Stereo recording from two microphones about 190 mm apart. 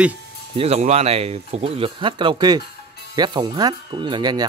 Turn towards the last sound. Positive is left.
turn(degrees=-20)  # may be behind; listen again after turning